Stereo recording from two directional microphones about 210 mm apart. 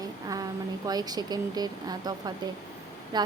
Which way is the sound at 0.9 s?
20° right (ahead or behind).